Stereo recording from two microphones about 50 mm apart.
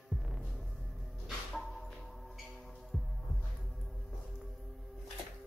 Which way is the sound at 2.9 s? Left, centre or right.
Centre.